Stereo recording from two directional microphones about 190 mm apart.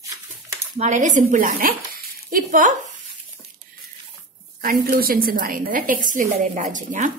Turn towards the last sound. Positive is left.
turn(degrees=-40)  # may be behind; listen again after turning